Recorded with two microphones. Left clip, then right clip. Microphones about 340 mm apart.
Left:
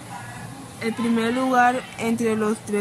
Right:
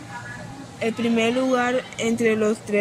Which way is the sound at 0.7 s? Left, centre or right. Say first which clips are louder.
Right 2 dB; centre.